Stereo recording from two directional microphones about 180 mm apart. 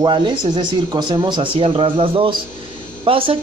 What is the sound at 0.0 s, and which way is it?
Speech, 25° right (ahead or behind).